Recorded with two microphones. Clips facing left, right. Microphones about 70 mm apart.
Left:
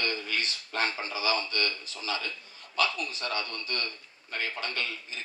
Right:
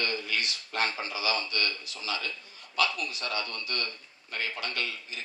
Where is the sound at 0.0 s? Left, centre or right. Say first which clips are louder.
Even; left.